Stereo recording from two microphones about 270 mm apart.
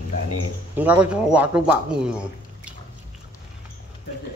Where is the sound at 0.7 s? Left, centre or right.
Centre.